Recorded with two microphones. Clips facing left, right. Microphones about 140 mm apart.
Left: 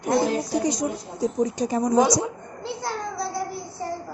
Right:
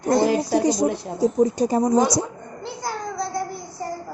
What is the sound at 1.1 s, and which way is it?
Speech, 30° right (ahead or behind).